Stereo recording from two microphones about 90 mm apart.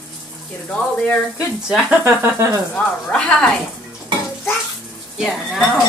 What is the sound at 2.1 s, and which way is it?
Speech, 30° right (ahead or behind).